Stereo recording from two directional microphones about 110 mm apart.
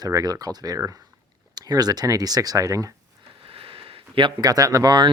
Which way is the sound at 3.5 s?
55° right (ahead or behind).